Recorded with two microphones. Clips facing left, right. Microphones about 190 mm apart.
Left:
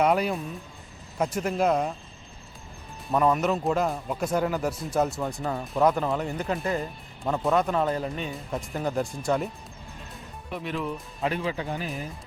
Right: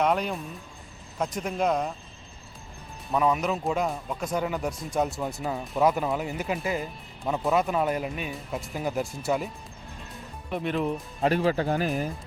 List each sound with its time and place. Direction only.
0.0 s speech: 5° left (ahead or behind)
3.1 s speech: centre (ahead or behind)
10.6 s speech: 50° right (ahead or behind)
10.8 s speech: 40° right (ahead or behind)